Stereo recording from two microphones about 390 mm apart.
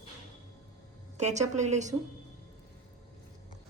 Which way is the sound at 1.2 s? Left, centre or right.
Centre.